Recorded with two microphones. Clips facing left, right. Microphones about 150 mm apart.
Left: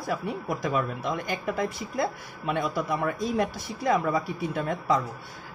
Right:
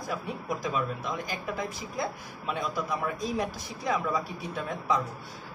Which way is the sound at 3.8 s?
55° left (ahead or behind).